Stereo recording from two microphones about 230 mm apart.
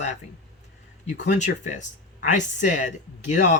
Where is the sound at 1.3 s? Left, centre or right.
Left.